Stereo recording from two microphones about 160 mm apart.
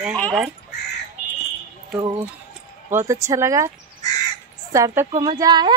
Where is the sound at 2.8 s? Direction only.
15° right (ahead or behind).